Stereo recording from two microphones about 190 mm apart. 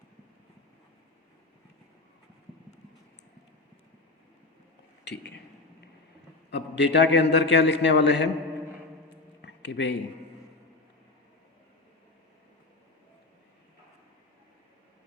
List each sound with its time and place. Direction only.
5.0 s speech: 65° left (ahead or behind)
6.5 s a man's voice: 65° left (ahead or behind)
9.4 s a sound: 65° left (ahead or behind)